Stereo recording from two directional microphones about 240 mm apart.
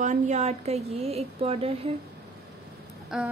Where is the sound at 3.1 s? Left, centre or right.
Centre.